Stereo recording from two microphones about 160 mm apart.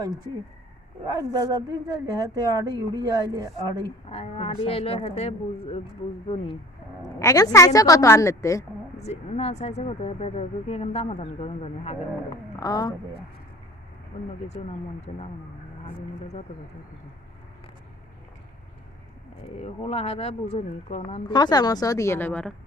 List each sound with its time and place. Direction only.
1.0 s a woman's voice: 20° right (ahead or behind)
4.1 s speech: 40° left (ahead or behind)
7.0 s speech: 20° left (ahead or behind)
9.0 s speech: 45° left (ahead or behind)
12.5 s a woman's voice: 25° left (ahead or behind)
14.4 s speech: 45° left (ahead or behind)
19.5 s speech: 40° left (ahead or behind); by 22.5 s 10° left (ahead or behind)